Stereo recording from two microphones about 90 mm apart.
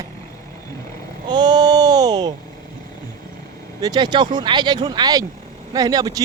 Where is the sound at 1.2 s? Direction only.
55° right (ahead or behind).